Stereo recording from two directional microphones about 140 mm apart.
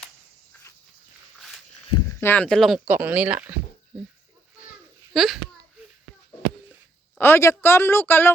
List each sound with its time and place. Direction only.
2.2 s speech: 10° left (ahead or behind)
2.8 s speech: 10° right (ahead or behind)
5.1 s speech: centre (ahead or behind)
7.2 s speech: 15° left (ahead or behind)